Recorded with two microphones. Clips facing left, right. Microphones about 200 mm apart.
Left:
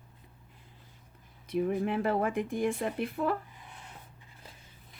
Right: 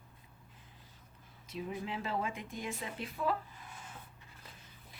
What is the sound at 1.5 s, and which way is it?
Speech, 55° left (ahead or behind).